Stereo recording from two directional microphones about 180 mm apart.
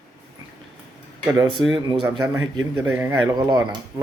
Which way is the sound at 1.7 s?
25° right (ahead or behind).